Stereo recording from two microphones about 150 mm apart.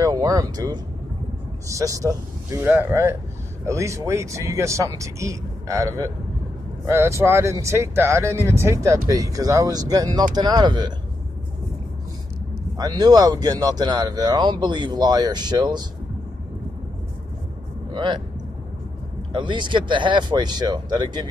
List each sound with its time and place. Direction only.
0.0 s speech: 25° right (ahead or behind)
12.7 s speech: 25° right (ahead or behind)
17.9 s speech: 30° right (ahead or behind)
19.3 s speech: 30° right (ahead or behind)